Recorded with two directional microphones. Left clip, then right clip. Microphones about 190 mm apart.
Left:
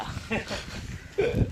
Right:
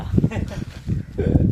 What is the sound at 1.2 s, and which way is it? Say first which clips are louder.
Speech: even; 20° left (ahead or behind).